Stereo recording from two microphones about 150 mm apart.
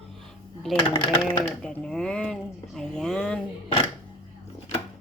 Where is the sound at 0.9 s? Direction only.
30° left (ahead or behind).